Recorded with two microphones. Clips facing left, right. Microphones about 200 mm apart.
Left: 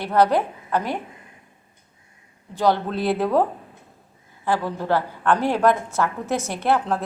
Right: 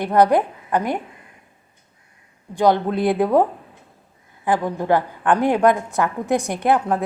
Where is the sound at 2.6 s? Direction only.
15° right (ahead or behind).